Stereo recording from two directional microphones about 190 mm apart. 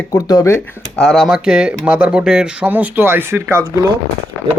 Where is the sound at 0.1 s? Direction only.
20° left (ahead or behind); by 3.7 s 15° right (ahead or behind).